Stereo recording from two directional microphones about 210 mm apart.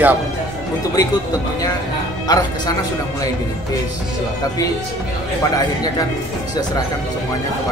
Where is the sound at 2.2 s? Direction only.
15° left (ahead or behind).